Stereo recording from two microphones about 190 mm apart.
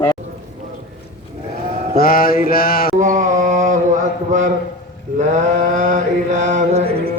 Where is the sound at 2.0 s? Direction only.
50° left (ahead or behind).